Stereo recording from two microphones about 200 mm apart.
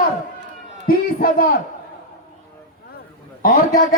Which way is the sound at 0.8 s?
45° left (ahead or behind).